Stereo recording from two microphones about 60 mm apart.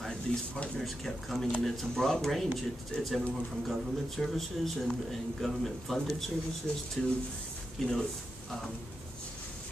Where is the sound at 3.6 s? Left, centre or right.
Centre.